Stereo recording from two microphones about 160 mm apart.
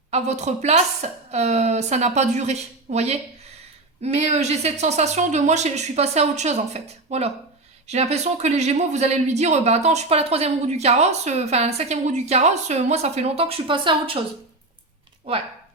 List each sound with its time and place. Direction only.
0.1 s speech: 45° right (ahead or behind)